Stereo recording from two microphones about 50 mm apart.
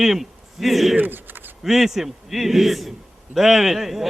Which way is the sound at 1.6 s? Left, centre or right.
Centre.